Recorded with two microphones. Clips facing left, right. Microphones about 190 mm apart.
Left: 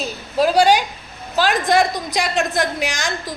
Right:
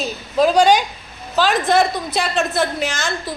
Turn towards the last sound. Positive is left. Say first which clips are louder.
# right 1 dB
turn(degrees=15)  # may be behind; listen again after turning